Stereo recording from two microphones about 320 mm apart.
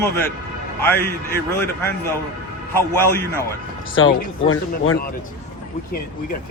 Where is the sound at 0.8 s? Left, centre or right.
Centre.